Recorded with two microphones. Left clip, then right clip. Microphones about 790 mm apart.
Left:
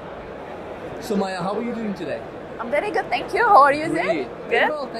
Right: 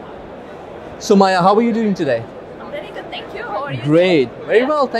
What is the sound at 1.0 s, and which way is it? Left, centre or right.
Speech, right.